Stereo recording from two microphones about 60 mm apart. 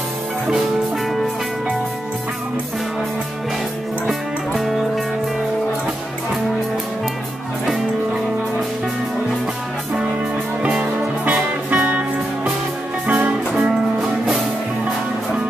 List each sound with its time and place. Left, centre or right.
4.5 s music: centre
10.6 s music: centre
13.0 s music: right